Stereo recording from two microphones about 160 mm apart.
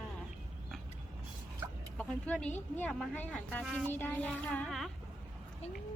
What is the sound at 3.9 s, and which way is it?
A woman's voice, 10° left (ahead or behind).